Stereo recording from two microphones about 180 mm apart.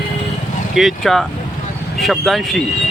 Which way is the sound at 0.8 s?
Centre (ahead or behind).